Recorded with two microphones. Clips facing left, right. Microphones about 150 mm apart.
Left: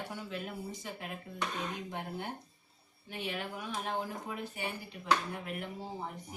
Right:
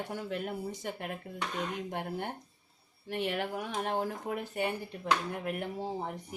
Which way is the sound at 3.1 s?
65° right (ahead or behind).